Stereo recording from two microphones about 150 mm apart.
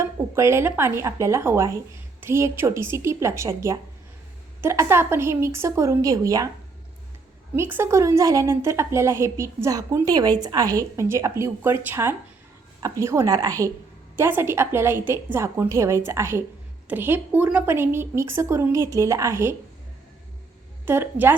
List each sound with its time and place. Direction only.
0.0 s a woman's voice: 20° right (ahead or behind)
7.5 s a woman's voice: 15° right (ahead or behind)
20.8 s a woman's voice: 15° right (ahead or behind)